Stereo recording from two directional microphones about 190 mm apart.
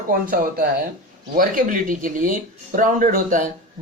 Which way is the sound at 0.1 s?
50° right (ahead or behind).